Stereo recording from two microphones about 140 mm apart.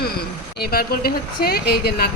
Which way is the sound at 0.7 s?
90° left.